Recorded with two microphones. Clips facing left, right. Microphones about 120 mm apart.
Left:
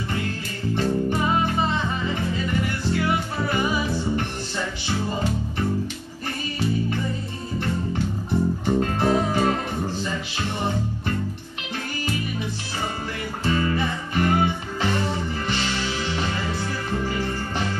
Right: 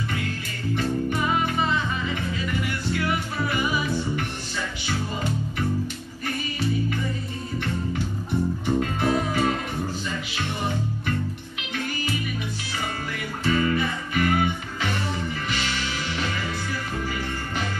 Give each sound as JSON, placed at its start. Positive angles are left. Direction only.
{"t": 0.7, "sound": "music", "side_deg": 30}
{"t": 8.7, "sound": "music", "side_deg": 30}
{"t": 13.5, "sound": "music", "side_deg": 30}